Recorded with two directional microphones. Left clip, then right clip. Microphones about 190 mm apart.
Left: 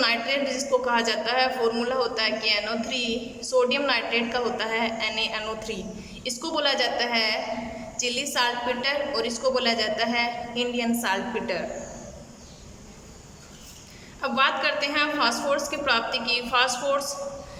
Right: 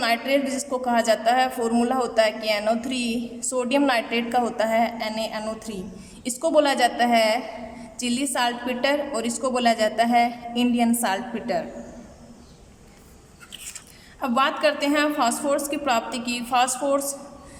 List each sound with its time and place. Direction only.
0.0 s a woman's voice: 35° right (ahead or behind)
14.2 s a woman's voice: 35° right (ahead or behind)